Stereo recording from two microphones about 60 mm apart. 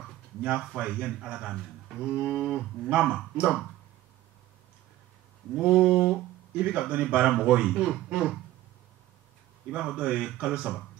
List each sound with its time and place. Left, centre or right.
0.4 s speech: right
3.2 s speech: right
5.6 s a man's voice: centre
9.7 s speech: centre